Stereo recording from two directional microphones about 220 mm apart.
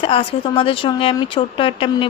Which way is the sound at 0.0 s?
25° left (ahead or behind).